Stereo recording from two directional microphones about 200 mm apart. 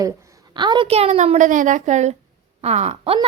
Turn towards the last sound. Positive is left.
turn(degrees=-30)  # may be behind; listen again after turning